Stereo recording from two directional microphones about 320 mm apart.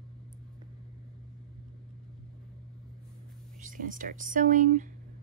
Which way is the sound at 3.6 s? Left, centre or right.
Right.